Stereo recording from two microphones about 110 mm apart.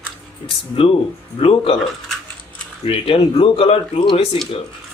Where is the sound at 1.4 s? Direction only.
60° left (ahead or behind).